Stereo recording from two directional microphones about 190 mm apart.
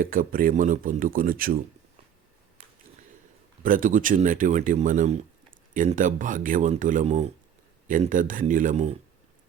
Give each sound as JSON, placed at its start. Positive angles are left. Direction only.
{"t": 0.0, "sound": "speech", "side_deg": -50}
{"t": 3.6, "sound": "speech", "side_deg": -45}